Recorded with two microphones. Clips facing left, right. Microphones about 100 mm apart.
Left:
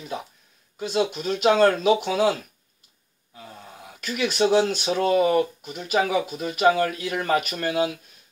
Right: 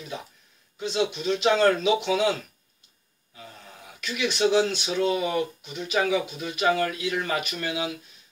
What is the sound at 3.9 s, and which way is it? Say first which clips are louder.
Speech: left 3 dB; 40° left (ahead or behind).